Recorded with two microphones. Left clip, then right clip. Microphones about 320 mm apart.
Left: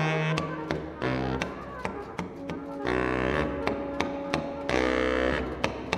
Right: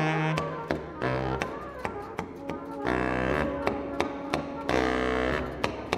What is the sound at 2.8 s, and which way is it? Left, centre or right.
Music, right.